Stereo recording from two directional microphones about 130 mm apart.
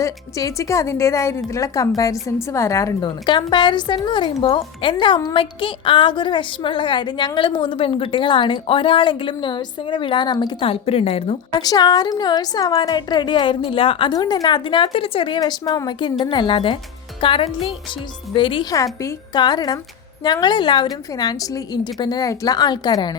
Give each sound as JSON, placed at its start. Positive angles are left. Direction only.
{"t": 0.0, "sound": "a woman's voice", "side_deg": 25}
{"t": 3.0, "sound": "a woman's voice", "side_deg": 35}
{"t": 11.5, "sound": "a woman's voice", "side_deg": 30}
{"t": 14.1, "sound": "a woman's voice", "side_deg": 30}
{"t": 15.4, "sound": "a woman's voice", "side_deg": 30}
{"t": 18.7, "sound": "a woman's voice", "side_deg": 25}